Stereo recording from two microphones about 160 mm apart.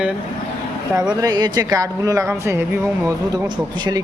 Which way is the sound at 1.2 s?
25° right (ahead or behind).